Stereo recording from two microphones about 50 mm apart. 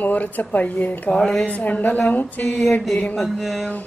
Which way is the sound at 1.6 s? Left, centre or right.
Left.